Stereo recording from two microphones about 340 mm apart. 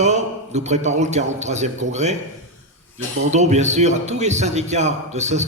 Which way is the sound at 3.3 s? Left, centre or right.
Centre.